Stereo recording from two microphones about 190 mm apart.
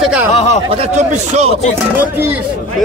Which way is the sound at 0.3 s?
35° left (ahead or behind).